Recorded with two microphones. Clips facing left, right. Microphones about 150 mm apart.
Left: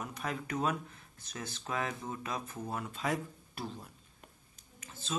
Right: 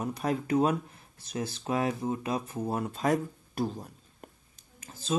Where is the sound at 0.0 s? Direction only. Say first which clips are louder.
Right 8 dB; 40° right (ahead or behind).